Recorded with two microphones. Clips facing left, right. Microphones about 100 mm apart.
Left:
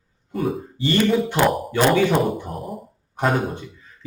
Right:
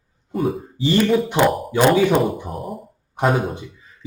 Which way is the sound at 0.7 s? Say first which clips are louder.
Right 2 dB; 15° right (ahead or behind).